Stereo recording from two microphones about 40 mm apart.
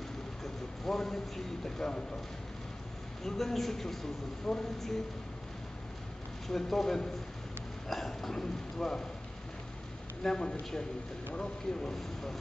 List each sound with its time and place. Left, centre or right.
0.4 s a man's voice: centre
3.3 s speech: centre
6.4 s speech: centre
10.2 s speech: centre
11.9 s speech: centre